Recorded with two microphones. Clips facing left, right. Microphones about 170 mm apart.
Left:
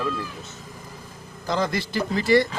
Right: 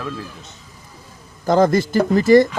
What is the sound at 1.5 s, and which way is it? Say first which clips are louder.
Speech: right 10 dB; 45° right (ahead or behind).